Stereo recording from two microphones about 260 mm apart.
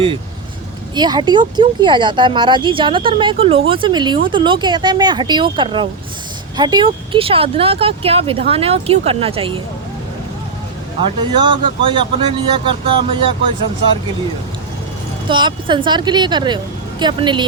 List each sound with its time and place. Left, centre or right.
0.9 s speech: centre
11.2 s speech: centre
15.3 s speech: centre